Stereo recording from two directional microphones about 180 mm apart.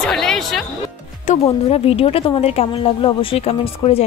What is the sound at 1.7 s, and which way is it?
Speech, 35° left (ahead or behind).